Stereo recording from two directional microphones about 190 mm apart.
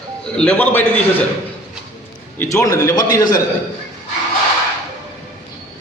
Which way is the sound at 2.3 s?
15° left (ahead or behind).